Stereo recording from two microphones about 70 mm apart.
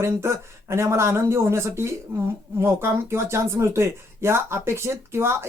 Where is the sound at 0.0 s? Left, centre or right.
Right.